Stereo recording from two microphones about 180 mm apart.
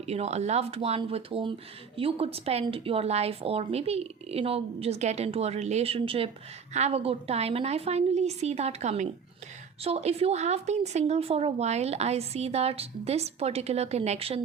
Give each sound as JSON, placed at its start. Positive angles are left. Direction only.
{"t": 0.0, "sound": "a woman's voice", "side_deg": -35}